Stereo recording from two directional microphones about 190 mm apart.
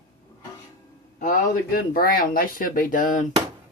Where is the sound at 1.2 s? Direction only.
50° left (ahead or behind).